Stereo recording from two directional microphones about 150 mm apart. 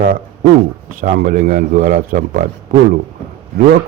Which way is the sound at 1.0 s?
65° right (ahead or behind).